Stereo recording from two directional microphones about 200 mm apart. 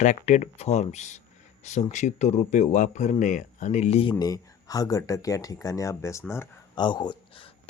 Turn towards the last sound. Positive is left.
turn(degrees=25)  # may be behind; listen again after turning